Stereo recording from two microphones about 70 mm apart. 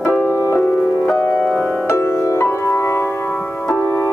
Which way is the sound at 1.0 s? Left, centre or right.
Left.